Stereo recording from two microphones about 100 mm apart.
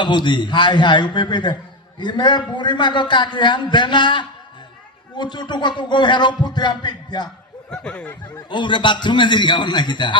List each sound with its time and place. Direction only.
0.0 s a man's voice: 50° left (ahead or behind)
7.7 s snicker: 10° left (ahead or behind)
8.4 s a man's voice: 50° left (ahead or behind)